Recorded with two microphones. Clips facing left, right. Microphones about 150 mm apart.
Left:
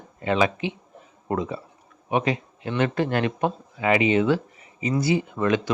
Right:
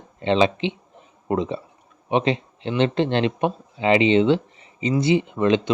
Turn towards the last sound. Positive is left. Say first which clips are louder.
# right 3 dB
turn(degrees=-20)  # may be behind; listen again after turning